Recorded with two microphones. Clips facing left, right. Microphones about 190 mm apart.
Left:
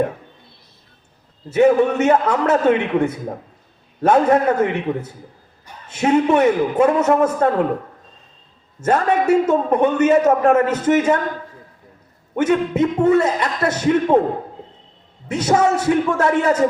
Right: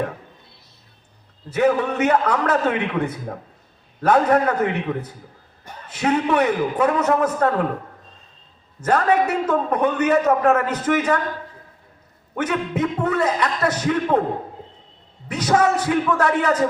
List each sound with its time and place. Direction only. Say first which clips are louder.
1.5 s a man's voice: left 5 dB; 25° left (ahead or behind)
8.8 s a man's voice: left 1 dB; 25° left (ahead or behind)
12.3 s a man's voice: left 6 dB; 25° left (ahead or behind)
15.3 s a man's voice: left 2 dB; 25° left (ahead or behind)